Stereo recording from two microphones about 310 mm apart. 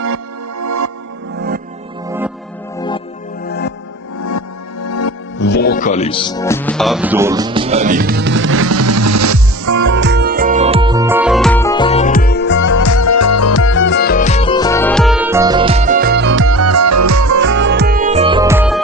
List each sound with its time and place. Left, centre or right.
0.6 s music: right
1.4 s music: right
2.0 s music: centre
2.7 s music: centre
3.4 s music: left
4.2 s music: left
5.4 s speech: left; by 9.8 s right
9.9 s music: right; by 12.7 s left
12.7 s music: left; by 17.5 s right
17.5 s music: right; by 18.8 s centre